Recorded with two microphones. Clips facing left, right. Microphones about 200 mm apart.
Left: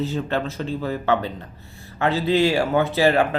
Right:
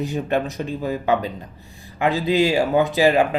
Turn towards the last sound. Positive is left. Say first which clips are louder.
# right 1 dB
turn(degrees=-15)  # may be behind; listen again after turning